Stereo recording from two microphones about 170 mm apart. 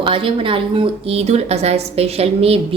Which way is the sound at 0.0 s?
30° right (ahead or behind).